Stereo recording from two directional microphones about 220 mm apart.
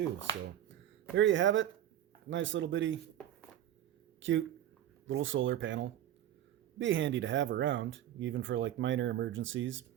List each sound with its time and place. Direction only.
1.1 s speech: 60° right (ahead or behind)
4.2 s speech: 60° right (ahead or behind)